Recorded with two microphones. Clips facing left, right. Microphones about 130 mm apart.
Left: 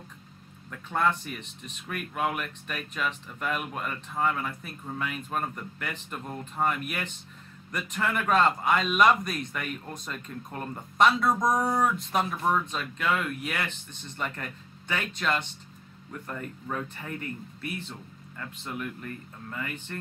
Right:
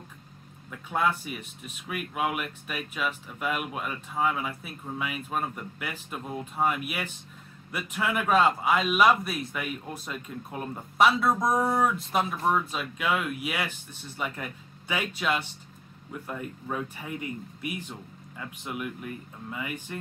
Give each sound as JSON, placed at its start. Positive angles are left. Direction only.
{"t": 0.7, "sound": "speech", "side_deg": -10}